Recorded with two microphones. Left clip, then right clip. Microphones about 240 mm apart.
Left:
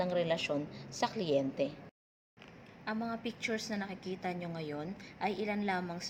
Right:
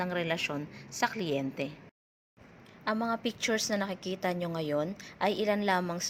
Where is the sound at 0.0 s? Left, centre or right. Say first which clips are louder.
Right 1 dB; right.